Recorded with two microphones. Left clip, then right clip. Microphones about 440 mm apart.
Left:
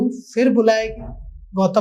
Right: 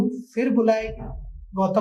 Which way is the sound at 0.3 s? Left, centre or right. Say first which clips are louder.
Left 5 dB; left.